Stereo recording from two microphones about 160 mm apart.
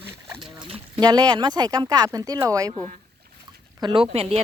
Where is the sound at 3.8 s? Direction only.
30° right (ahead or behind).